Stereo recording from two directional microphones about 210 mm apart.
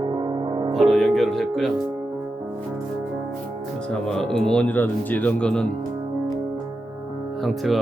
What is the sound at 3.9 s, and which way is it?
Speech, 5° left (ahead or behind).